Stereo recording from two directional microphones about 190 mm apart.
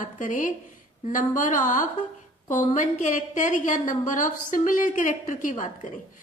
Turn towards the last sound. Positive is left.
turn(degrees=45)  # may be behind; listen again after turning